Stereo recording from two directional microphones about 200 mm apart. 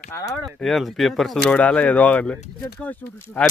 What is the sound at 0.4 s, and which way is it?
Speech, centre (ahead or behind).